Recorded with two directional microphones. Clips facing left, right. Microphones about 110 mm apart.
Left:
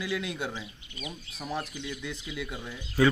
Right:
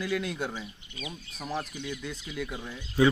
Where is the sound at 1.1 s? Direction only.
10° right (ahead or behind).